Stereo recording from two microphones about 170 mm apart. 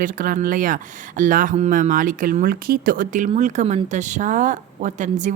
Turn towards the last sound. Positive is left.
turn(degrees=-45)  # may be behind; listen again after turning